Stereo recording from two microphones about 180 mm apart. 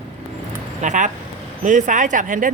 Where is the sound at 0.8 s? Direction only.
45° right (ahead or behind).